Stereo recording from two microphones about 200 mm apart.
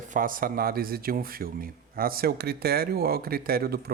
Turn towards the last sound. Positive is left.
turn(degrees=-50)  # may be behind; listen again after turning